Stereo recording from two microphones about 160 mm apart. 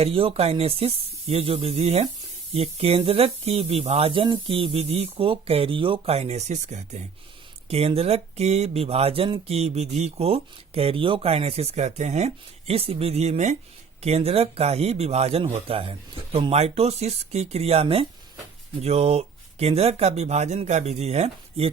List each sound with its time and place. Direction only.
0.0 s speech: 35° right (ahead or behind)